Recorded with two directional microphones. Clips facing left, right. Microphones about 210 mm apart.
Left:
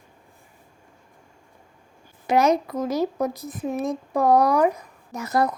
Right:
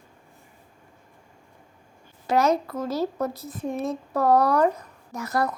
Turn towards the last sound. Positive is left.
turn(degrees=20)  # may be behind; listen again after turning